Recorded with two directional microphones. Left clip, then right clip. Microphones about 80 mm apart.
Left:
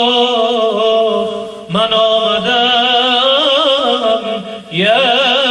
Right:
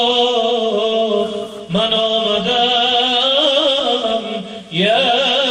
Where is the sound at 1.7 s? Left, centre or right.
Left.